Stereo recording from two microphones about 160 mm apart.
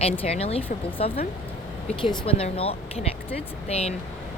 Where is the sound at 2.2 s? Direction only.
35° left (ahead or behind).